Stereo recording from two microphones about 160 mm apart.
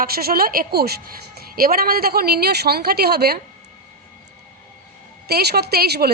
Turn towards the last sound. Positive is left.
turn(degrees=-85)